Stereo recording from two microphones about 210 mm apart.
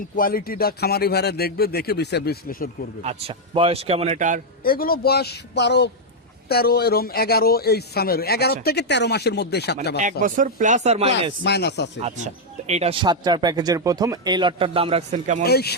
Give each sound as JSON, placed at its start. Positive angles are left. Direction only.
{"t": 0.2, "sound": "a man's voice", "side_deg": 45}
{"t": 3.0, "sound": "speech", "side_deg": -30}
{"t": 4.6, "sound": "a man's voice", "side_deg": 45}
{"t": 10.0, "sound": "speech", "side_deg": -40}
{"t": 11.4, "sound": "a man's voice", "side_deg": 55}
{"t": 12.0, "sound": "speech", "side_deg": -35}
{"t": 15.4, "sound": "a man's voice", "side_deg": 50}